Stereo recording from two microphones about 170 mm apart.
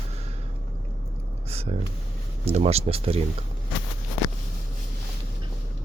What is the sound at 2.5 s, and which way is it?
Speech, 35° right (ahead or behind).